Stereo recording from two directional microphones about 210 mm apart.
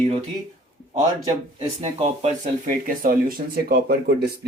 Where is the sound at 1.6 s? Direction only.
30° right (ahead or behind); by 4.4 s 50° right (ahead or behind).